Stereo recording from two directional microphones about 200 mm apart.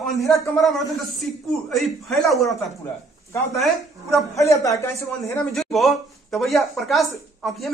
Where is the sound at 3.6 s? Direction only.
Centre (ahead or behind).